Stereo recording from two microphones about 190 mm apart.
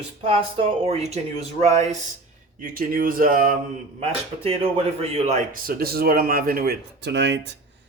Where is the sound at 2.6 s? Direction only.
50° right (ahead or behind).